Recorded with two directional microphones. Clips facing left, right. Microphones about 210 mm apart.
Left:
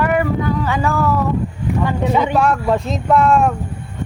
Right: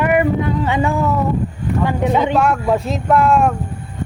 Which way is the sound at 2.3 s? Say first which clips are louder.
Even; 5° right (ahead or behind).